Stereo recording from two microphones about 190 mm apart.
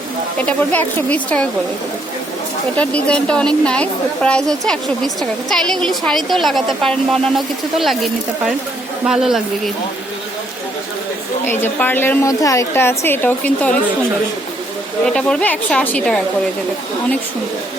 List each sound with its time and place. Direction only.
0.4 s a woman's voice: 10° left (ahead or behind)
2.7 s a woman's voice: 5° left (ahead or behind)
11.4 s a woman's voice: 10° left (ahead or behind)
15.0 s a woman's voice: 5° left (ahead or behind)